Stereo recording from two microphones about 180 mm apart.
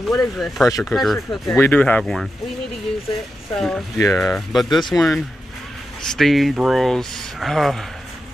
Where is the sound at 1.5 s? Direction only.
10° left (ahead or behind).